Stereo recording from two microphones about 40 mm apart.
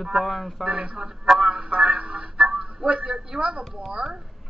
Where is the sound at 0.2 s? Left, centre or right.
Centre.